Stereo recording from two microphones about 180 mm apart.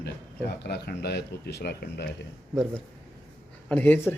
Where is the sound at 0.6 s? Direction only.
65° left (ahead or behind).